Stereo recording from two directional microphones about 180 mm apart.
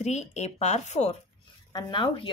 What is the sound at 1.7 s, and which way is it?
Speech, 25° left (ahead or behind).